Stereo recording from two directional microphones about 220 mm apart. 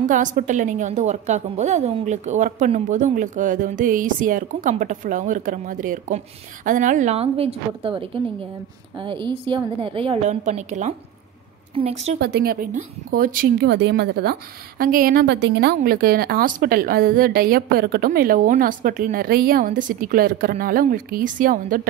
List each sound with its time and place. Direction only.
0.1 s a woman's voice: 35° right (ahead or behind)
12.2 s a woman's voice: 45° right (ahead or behind)